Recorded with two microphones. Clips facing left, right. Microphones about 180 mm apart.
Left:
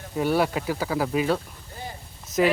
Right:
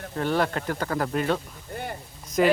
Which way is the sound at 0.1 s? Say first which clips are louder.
Left 2 dB; 10° left (ahead or behind).